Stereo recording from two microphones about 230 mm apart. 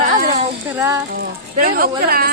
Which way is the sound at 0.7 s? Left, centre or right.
Centre.